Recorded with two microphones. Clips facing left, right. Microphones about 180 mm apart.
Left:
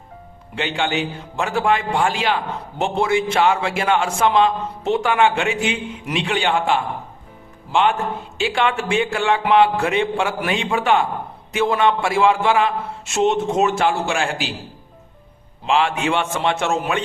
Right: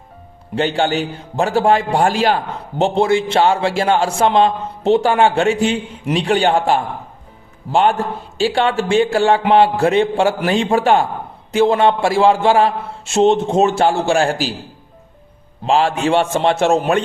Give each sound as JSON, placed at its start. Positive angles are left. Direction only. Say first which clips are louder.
{"t": 0.5, "sound": "a man's voice", "louder": "right 5 dB", "side_deg": -40}
{"t": 15.6, "sound": "a man's voice", "louder": "right 3 dB", "side_deg": -35}